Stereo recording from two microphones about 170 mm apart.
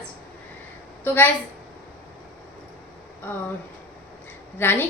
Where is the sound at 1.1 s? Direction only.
10° left (ahead or behind).